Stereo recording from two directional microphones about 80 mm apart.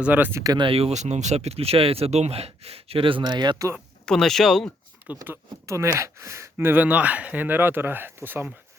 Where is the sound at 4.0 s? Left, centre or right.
Centre.